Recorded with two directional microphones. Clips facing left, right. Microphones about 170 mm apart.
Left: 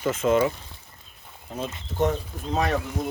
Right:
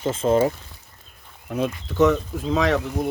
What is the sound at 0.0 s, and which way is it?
Speech, 30° right (ahead or behind).